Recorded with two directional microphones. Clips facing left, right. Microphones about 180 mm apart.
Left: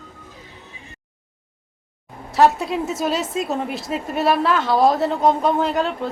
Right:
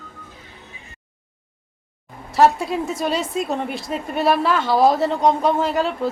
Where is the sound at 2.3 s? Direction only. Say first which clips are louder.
Even; centre (ahead or behind).